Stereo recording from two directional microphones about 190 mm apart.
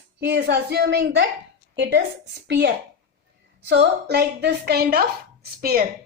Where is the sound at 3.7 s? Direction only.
60° right (ahead or behind).